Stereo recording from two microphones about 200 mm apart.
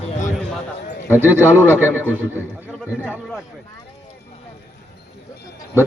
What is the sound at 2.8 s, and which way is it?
Speech, 10° left (ahead or behind).